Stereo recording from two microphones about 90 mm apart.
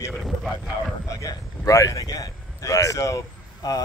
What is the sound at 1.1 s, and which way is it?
A man's voice, 40° left (ahead or behind).